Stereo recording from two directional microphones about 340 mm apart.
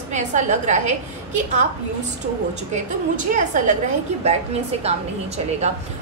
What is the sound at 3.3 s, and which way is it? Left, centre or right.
A woman's voice, right.